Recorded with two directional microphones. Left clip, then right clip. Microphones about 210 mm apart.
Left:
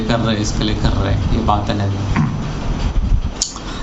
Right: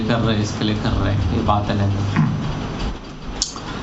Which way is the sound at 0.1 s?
50° left (ahead or behind).